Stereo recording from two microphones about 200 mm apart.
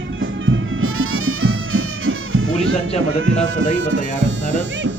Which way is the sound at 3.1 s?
75° right (ahead or behind).